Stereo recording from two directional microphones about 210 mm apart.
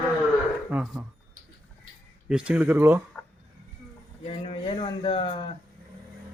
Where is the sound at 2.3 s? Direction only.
5° right (ahead or behind).